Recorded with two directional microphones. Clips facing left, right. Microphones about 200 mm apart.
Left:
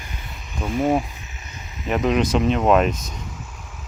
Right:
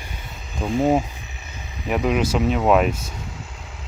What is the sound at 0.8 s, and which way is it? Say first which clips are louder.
Speech: right 1 dB; 25° right (ahead or behind).